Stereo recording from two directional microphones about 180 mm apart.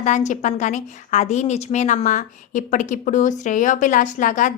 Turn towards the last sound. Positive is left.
turn(degrees=45)  # may be behind; listen again after turning